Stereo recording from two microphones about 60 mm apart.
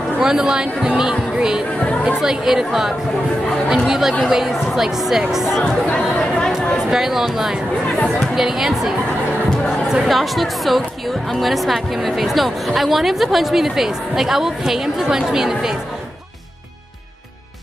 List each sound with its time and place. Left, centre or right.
0.2 s speech: centre
3.7 s chatter: centre
4.2 s speech: centre
5.6 s speech: centre
6.9 s speech: centre
10.0 s speech: centre